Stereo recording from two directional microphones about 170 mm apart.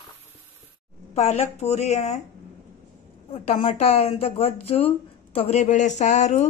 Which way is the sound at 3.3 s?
40° left (ahead or behind).